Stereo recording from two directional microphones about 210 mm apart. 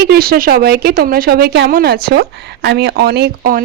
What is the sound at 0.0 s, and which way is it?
Speech, 50° right (ahead or behind).